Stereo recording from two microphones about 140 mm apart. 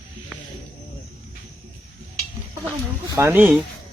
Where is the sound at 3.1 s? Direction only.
20° right (ahead or behind).